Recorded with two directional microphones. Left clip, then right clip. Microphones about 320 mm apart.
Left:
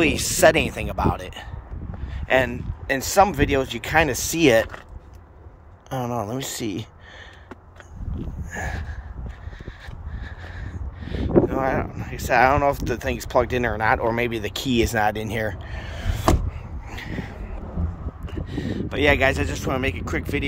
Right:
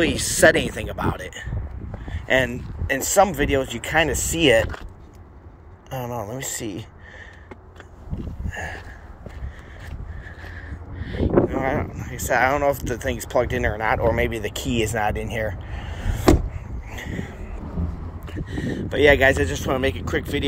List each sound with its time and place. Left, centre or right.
0.0 s speech: centre
5.9 s speech: centre
10.2 s speech: centre
16.0 s a sound: left
18.9 s speech: centre